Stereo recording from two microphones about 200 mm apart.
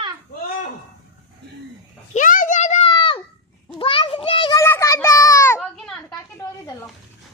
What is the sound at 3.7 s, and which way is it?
Children playing, 25° left (ahead or behind).